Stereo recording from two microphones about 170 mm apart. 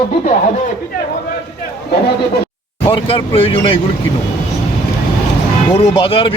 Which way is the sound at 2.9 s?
30° left (ahead or behind).